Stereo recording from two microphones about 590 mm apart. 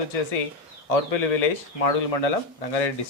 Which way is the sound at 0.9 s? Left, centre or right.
Left.